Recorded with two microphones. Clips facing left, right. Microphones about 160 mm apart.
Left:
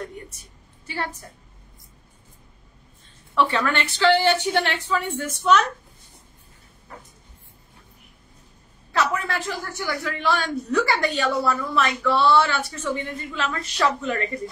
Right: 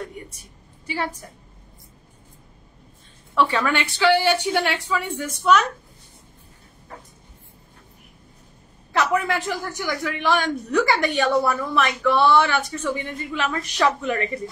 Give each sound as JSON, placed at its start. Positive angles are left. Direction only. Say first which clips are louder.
{"t": 0.4, "sound": "a sound", "louder": "right 3 dB", "side_deg": -15}
{"t": 3.3, "sound": "speech", "louder": "right 1 dB", "side_deg": -10}
{"t": 8.9, "sound": "speech", "louder": "right 3 dB", "side_deg": -15}